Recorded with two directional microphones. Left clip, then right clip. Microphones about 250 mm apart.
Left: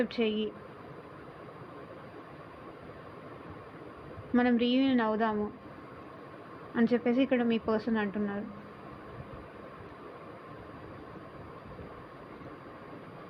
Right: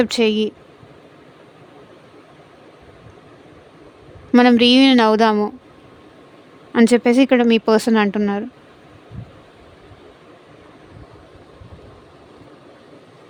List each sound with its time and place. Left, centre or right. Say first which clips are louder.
0.0 s speech: right 14 dB; right
4.3 s speech: right 16 dB; right
6.7 s speech: right 14 dB; right